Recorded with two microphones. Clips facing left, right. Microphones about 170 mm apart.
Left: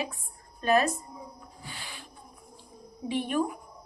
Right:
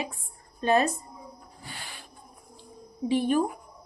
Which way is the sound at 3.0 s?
30° right (ahead or behind).